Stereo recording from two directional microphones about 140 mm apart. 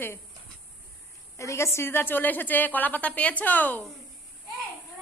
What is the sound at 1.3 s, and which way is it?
A woman's voice, 20° left (ahead or behind).